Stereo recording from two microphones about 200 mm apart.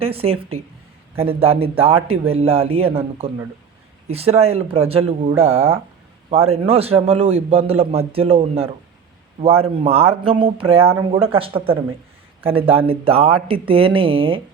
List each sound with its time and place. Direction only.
0.0 s speech: 30° right (ahead or behind)